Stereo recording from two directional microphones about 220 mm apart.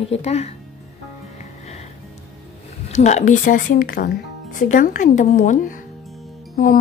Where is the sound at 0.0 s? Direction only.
30° left (ahead or behind).